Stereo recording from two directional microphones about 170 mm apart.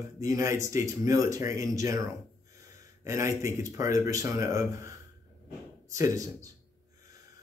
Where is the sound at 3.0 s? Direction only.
15° right (ahead or behind).